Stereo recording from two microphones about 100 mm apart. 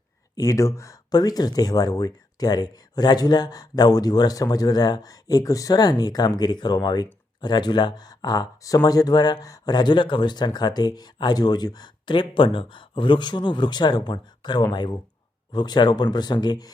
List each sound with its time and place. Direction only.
0.3 s speech: 35° left (ahead or behind)